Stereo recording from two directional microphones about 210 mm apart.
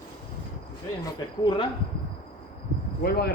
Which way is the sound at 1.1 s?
20° left (ahead or behind).